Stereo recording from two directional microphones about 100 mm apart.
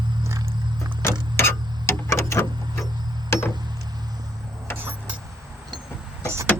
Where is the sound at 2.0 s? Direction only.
30° left (ahead or behind).